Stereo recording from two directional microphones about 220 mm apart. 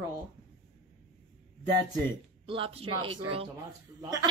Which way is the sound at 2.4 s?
25° right (ahead or behind).